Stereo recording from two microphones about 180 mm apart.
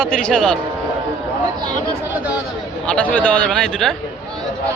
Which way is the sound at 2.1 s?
5° right (ahead or behind).